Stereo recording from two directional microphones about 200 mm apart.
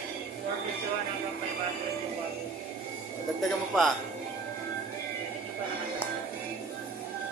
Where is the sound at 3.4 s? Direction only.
Centre (ahead or behind).